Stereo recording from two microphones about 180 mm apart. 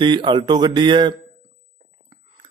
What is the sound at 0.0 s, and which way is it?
Speech, 25° right (ahead or behind).